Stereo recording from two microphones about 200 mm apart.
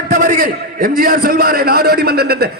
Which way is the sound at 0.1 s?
45° right (ahead or behind).